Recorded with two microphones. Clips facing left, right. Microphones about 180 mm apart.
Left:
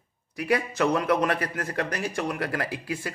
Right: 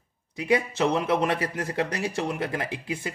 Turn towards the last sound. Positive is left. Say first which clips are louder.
# even
turn(degrees=-25)  # may be behind; listen again after turning